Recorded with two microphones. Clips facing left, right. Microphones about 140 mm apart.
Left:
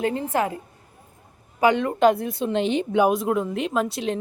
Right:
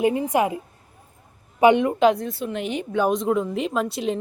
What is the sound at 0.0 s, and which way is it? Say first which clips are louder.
A woman's voice: right 3 dB; 15° right (ahead or behind).